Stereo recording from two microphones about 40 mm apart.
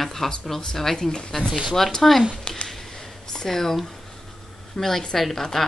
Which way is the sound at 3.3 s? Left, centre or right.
Centre.